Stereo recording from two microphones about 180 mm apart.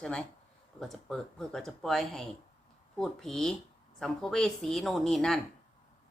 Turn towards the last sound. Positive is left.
turn(degrees=0)  # may be behind; listen again after turning